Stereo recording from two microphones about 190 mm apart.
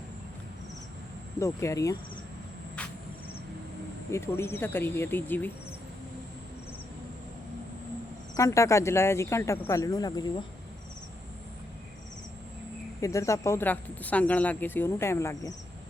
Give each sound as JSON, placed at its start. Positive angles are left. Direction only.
{"t": 1.4, "sound": "speech", "side_deg": 15}
{"t": 4.1, "sound": "speech", "side_deg": 15}
{"t": 8.4, "sound": "speech", "side_deg": 15}
{"t": 13.0, "sound": "speech", "side_deg": 15}